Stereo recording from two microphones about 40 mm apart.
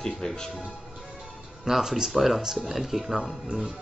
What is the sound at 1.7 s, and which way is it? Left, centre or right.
Speech, centre.